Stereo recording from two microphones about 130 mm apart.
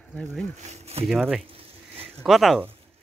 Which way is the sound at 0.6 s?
55° right (ahead or behind).